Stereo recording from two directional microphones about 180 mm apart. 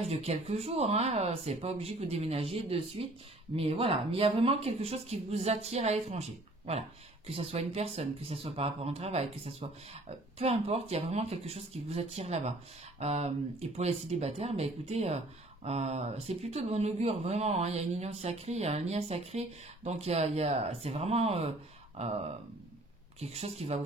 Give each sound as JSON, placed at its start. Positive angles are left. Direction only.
{"t": 0.0, "sound": "speech", "side_deg": -35}
{"t": 23.2, "sound": "speech", "side_deg": -35}